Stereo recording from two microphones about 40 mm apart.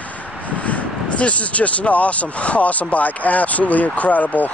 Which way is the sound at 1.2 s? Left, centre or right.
Left.